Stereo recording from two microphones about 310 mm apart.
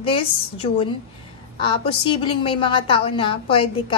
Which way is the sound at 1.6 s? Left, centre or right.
Centre.